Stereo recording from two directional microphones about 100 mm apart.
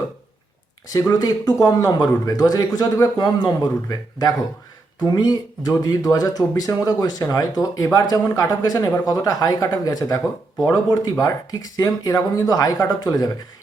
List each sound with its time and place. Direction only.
0.9 s speech: 35° left (ahead or behind)